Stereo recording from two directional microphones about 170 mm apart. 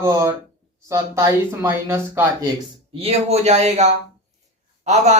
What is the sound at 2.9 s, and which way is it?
Speech, 35° right (ahead or behind).